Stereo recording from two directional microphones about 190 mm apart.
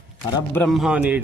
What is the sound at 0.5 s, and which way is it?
Speech, centre (ahead or behind).